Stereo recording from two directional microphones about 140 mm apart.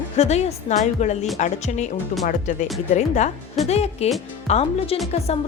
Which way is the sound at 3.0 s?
55° left (ahead or behind).